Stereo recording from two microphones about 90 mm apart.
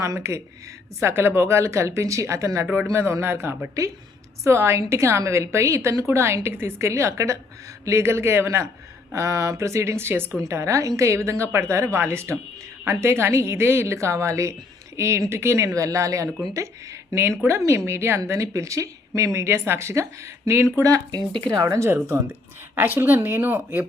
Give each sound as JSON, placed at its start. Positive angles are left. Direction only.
{"t": 0.0, "sound": "a woman's voice", "side_deg": -35}
{"t": 22.7, "sound": "speech", "side_deg": -25}